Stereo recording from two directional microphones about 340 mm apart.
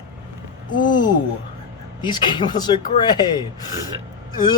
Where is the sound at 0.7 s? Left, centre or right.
Centre.